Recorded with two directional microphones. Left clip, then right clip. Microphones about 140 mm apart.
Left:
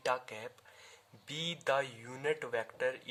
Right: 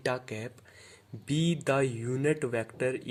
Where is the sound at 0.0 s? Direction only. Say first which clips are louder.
Right 3 dB; 30° right (ahead or behind).